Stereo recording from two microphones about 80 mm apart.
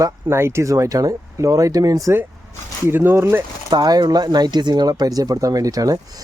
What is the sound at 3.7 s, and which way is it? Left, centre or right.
Speech, right.